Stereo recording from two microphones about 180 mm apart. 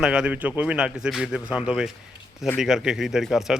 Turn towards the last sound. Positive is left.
turn(degrees=0)  # may be behind; listen again after turning